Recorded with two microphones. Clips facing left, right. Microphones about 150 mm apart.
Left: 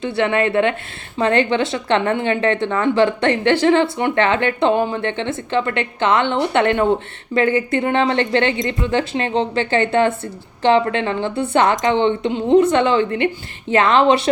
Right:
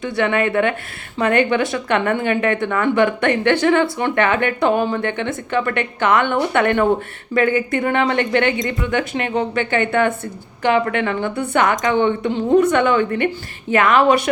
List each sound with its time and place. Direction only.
0.0 s a woman's voice: 30° left (ahead or behind)